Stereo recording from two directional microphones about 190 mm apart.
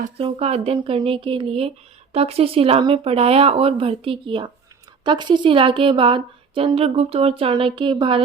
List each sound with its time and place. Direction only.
0.2 s a woman's voice: 30° right (ahead or behind)